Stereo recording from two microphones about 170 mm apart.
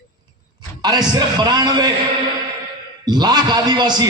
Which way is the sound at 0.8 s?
25° right (ahead or behind).